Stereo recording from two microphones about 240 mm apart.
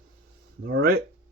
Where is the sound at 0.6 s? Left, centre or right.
Right.